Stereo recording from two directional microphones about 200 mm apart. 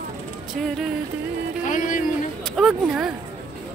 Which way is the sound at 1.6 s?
40° left (ahead or behind).